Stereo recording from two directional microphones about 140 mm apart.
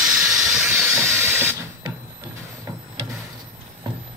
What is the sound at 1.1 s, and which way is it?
Printer, 15° right (ahead or behind).